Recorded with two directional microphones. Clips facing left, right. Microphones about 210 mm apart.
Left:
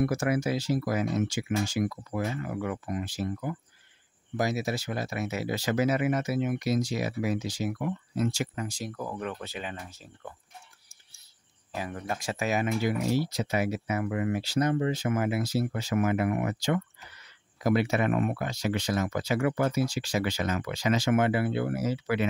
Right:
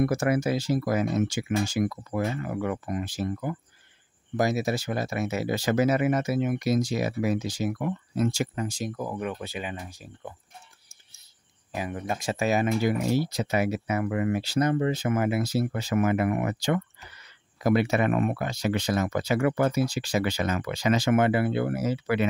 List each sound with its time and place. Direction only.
0.0 s speech: 50° right (ahead or behind)
8.5 s speech: 25° right (ahead or behind)
11.7 s speech: 15° right (ahead or behind)
12.8 s speech: 60° right (ahead or behind)